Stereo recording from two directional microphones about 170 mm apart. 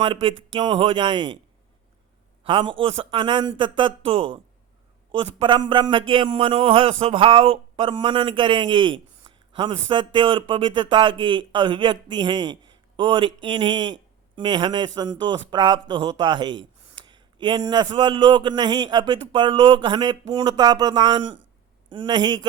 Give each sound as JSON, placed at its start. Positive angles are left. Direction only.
{"t": 0.0, "sound": "speech", "side_deg": -30}
{"t": 2.4, "sound": "a man's voice", "side_deg": -30}